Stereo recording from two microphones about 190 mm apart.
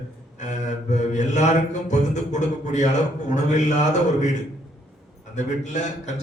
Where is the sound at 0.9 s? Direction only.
40° left (ahead or behind).